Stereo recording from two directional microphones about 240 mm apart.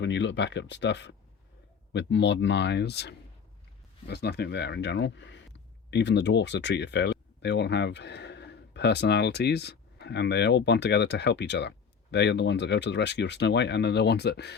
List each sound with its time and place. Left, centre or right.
0.0 s speech: left